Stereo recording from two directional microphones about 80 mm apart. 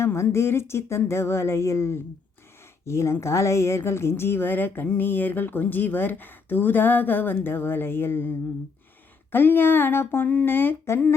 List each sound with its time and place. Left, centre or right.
0.0 s a woman's voice: left